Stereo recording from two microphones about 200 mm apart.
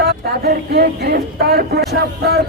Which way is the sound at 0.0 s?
50° right (ahead or behind).